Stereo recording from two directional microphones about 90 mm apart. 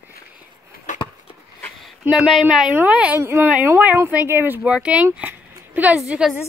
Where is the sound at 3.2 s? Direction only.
30° right (ahead or behind).